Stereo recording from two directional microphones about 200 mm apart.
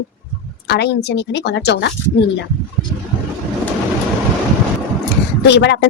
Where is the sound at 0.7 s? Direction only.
55° left (ahead or behind).